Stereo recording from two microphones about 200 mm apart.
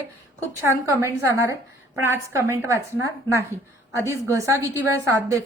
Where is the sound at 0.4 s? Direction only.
15° right (ahead or behind).